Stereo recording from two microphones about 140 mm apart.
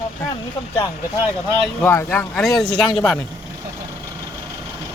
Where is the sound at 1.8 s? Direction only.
15° left (ahead or behind).